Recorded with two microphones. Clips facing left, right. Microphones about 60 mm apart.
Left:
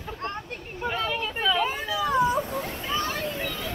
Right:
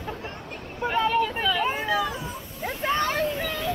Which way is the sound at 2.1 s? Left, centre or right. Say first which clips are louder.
Left 12 dB; left.